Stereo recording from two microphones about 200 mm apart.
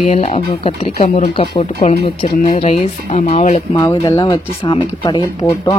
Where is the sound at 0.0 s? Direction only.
35° left (ahead or behind).